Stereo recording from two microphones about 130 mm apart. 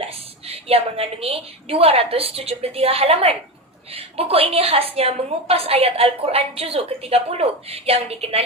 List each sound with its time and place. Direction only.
0.4 s a woman's voice: 50° right (ahead or behind)